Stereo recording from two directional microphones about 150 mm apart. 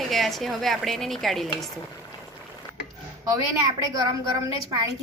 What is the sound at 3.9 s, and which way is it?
Speech, 25° right (ahead or behind).